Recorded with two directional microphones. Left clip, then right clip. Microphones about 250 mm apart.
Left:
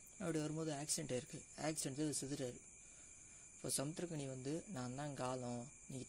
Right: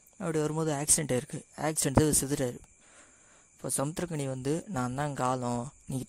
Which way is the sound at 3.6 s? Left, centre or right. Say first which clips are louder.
Right 11 dB; right.